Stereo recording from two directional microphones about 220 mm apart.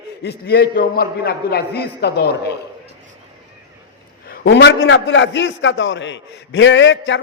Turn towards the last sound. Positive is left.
turn(degrees=55)  # may be behind; listen again after turning